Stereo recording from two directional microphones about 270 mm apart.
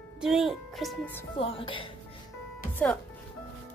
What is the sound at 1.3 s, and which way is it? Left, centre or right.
Speech, centre.